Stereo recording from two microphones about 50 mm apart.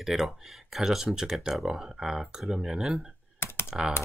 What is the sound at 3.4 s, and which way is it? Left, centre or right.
Computer keyboard, left.